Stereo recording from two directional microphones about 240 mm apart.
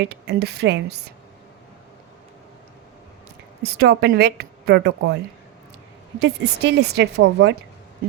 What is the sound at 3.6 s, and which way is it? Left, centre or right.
Speech, right.